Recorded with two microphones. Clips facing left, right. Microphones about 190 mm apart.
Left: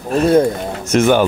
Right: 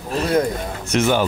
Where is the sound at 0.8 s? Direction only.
50° left (ahead or behind).